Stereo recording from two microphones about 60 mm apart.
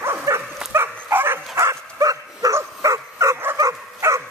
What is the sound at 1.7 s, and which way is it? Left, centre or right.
Bow-wow, right.